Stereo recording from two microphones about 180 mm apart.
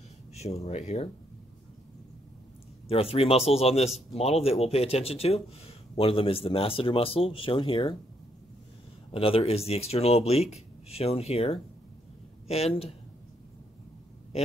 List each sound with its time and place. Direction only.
0.4 s speech: 35° left (ahead or behind)
2.9 s speech: 30° left (ahead or behind)
9.1 s speech: 30° left (ahead or behind)